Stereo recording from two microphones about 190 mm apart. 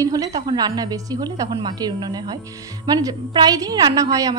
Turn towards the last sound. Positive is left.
turn(degrees=-20)  # may be behind; listen again after turning